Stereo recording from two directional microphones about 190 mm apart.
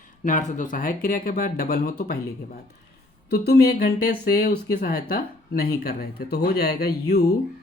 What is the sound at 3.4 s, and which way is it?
Speech, 55° left (ahead or behind).